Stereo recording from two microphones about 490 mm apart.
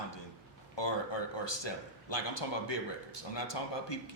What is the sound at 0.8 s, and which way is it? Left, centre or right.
A man's voice, left.